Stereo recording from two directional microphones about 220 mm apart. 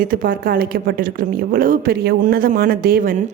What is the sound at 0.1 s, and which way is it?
A woman's voice, 40° right (ahead or behind).